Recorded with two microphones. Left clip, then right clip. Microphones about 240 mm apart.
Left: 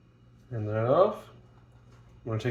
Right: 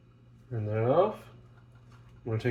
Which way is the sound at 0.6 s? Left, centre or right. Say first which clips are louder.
Left 2 dB; right.